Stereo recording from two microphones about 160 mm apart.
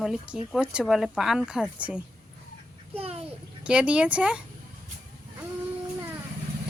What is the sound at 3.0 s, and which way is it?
Bathtub, 40° right (ahead or behind).